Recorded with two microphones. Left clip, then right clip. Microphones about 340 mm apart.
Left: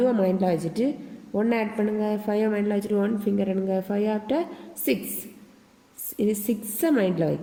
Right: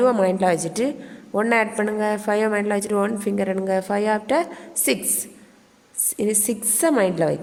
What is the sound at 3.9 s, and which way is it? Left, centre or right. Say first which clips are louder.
Speech: right 7 dB; centre.